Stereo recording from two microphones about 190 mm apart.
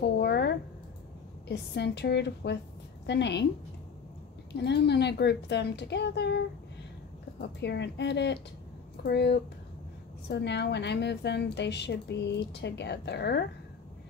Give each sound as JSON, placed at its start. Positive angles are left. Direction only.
{"t": 0.0, "sound": "a sound", "side_deg": 60}
{"t": 1.5, "sound": "a woman's voice", "side_deg": 60}
{"t": 4.6, "sound": "a woman's voice", "side_deg": 60}